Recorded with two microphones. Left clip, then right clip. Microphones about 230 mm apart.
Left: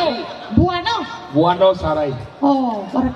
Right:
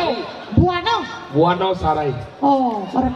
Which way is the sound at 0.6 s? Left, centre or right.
Left.